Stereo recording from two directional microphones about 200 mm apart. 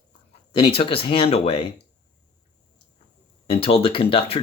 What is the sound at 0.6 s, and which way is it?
Speech, 30° left (ahead or behind).